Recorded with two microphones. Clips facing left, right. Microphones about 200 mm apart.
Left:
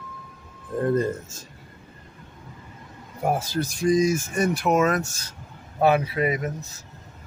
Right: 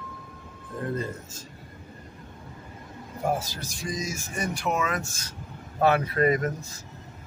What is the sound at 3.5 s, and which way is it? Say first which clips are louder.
Speech: left 13 dB; 60° left (ahead or behind).